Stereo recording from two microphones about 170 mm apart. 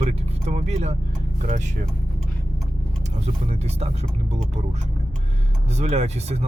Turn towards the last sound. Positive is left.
turn(degrees=-40)  # may be behind; listen again after turning